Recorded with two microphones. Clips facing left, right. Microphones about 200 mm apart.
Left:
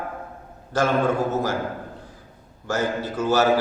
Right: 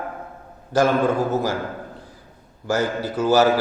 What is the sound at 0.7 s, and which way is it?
Speech, 35° right (ahead or behind).